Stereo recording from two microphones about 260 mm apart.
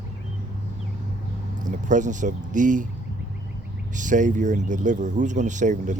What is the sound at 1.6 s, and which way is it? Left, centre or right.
Speech, right.